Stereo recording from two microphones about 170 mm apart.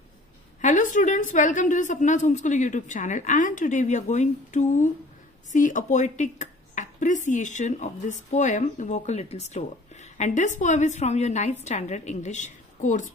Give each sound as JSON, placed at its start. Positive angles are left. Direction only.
{"t": 0.6, "sound": "a woman's voice", "side_deg": 45}